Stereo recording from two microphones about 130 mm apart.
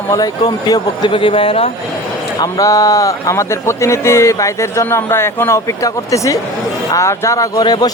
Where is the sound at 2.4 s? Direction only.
25° left (ahead or behind).